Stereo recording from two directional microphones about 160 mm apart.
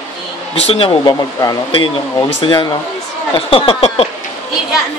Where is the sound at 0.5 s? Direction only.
40° left (ahead or behind).